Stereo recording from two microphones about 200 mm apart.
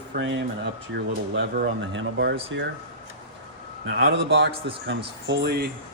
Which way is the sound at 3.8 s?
60° right (ahead or behind).